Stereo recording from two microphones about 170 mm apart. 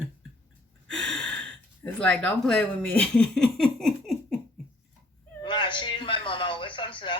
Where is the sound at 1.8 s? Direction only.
5° left (ahead or behind).